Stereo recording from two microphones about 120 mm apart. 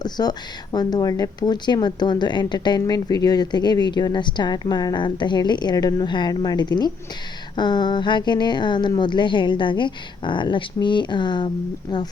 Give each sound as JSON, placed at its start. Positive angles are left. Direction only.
{"t": 0.0, "sound": "speech", "side_deg": 35}